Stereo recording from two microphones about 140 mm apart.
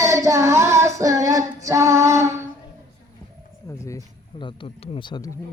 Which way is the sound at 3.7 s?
20° left (ahead or behind).